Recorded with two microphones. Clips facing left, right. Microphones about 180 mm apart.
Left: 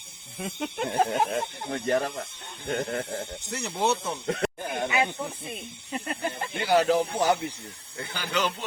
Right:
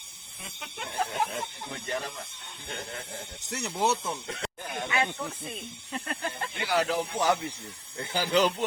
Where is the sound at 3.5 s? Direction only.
Centre (ahead or behind).